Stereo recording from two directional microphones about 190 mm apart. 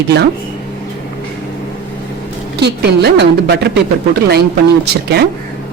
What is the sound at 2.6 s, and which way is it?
A woman's voice, 60° right (ahead or behind).